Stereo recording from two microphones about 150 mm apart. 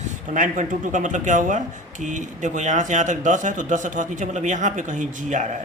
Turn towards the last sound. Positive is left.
turn(degrees=-55)  # may be behind; listen again after turning